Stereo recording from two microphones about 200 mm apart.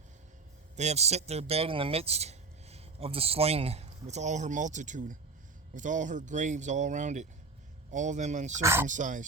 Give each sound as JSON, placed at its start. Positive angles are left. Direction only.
{"t": 0.8, "sound": "speech", "side_deg": -35}
{"t": 8.6, "sound": "speech", "side_deg": -10}
{"t": 8.9, "sound": "speech", "side_deg": -40}